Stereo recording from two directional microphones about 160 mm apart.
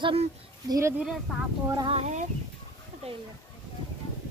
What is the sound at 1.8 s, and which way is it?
Speech, 45° right (ahead or behind).